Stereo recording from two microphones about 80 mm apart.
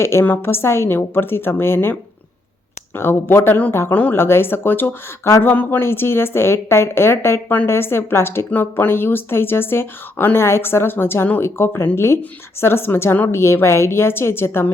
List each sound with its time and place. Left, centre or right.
0.0 s a woman's voice: left